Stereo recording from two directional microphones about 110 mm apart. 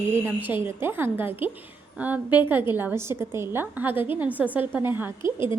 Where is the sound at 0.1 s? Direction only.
25° right (ahead or behind).